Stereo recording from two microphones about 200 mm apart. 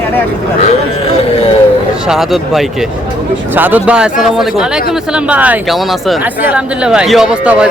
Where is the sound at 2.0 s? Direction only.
Centre (ahead or behind).